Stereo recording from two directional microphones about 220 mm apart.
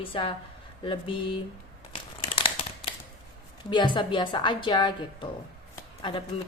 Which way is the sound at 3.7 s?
20° left (ahead or behind).